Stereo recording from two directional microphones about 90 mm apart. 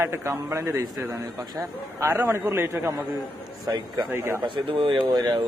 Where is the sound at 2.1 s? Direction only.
25° right (ahead or behind).